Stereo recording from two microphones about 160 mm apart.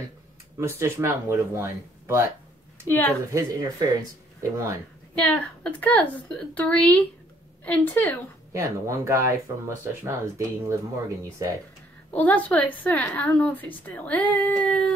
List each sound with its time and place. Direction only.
0.6 s speech: 15° right (ahead or behind)
3.3 s speech: 25° right (ahead or behind)
5.1 s a woman's voice: 5° left (ahead or behind)
8.5 s speech: 20° right (ahead or behind)
12.1 s a woman's voice: 10° left (ahead or behind)